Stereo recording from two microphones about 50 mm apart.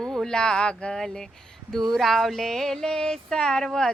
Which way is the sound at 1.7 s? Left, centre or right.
Centre.